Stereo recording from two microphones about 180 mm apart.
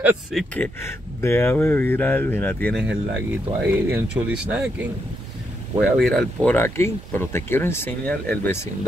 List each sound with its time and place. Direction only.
0.0 s a man's voice: centre (ahead or behind)
0.6 s speech: 15° left (ahead or behind)
2.7 s a man's voice: 5° right (ahead or behind)